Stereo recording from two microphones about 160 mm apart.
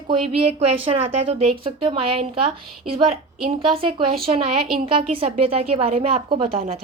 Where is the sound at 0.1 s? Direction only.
35° right (ahead or behind).